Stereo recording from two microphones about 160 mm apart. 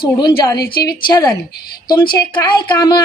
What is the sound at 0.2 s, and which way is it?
A woman's voice, 25° left (ahead or behind).